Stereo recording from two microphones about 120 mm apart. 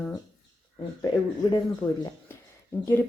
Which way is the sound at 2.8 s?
20° left (ahead or behind).